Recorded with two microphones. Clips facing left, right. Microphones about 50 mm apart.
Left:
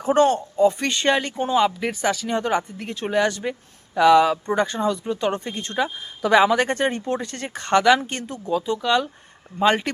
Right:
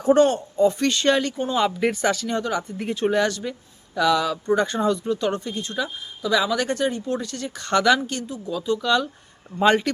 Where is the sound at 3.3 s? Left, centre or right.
Left.